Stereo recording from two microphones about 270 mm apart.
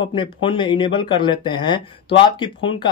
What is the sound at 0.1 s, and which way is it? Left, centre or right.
Speech, centre.